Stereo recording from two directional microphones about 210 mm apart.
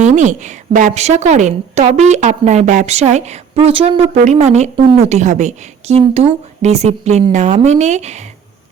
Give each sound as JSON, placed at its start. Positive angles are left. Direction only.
{"t": 0.0, "sound": "a woman's voice", "side_deg": -35}